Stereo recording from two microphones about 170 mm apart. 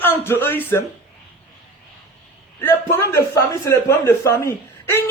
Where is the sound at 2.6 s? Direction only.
15° left (ahead or behind).